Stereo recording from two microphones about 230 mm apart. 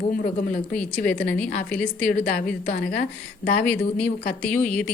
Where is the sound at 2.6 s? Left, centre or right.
Left.